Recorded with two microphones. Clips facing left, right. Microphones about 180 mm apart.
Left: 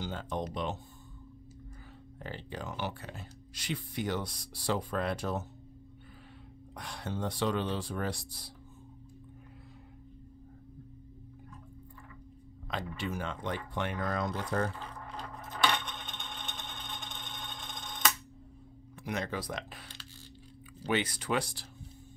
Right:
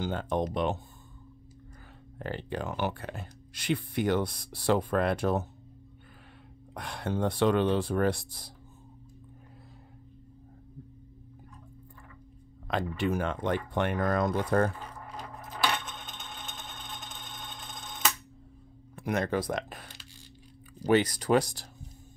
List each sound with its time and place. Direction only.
0.0 s speech: 55° right (ahead or behind)
2.1 s speech: 60° right (ahead or behind)
6.7 s speech: 55° right (ahead or behind)
12.6 s speech: 55° right (ahead or behind)
14.8 s a sound: 10° right (ahead or behind)
18.9 s speech: 50° right (ahead or behind)